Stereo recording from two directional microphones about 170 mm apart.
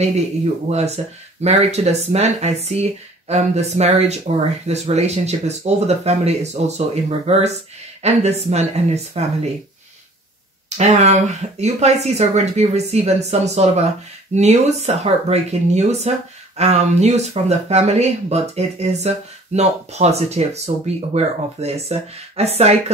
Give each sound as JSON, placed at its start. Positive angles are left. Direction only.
{"t": 0.7, "sound": "speech", "side_deg": -40}
{"t": 10.8, "sound": "speech", "side_deg": -40}